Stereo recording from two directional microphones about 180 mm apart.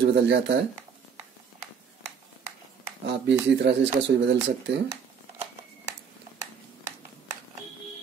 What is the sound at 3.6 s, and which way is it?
Speech, 85° right.